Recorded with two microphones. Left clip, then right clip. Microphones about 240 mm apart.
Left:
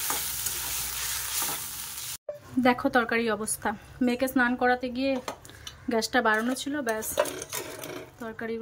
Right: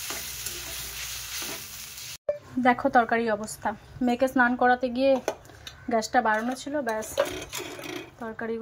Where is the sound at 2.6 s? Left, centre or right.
Centre.